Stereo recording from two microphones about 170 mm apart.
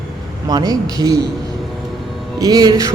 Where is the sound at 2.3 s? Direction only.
20° right (ahead or behind).